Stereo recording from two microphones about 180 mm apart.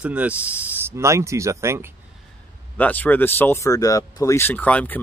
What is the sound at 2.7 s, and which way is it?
Speech, 10° left (ahead or behind).